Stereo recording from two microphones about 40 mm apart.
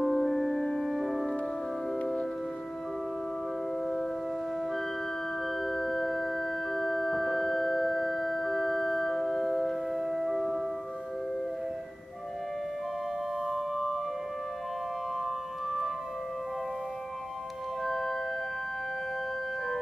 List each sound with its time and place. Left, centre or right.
0.0 s music: centre
0.8 s music: centre
3.8 s music: centre
5.6 s music: centre
13.5 s music: centre
15.2 s music: centre
17.8 s organ: centre